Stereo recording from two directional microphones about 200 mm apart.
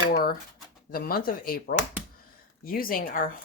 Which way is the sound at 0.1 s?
50° left (ahead or behind).